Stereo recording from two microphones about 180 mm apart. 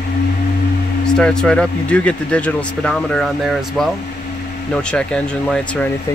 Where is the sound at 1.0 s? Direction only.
5° left (ahead or behind).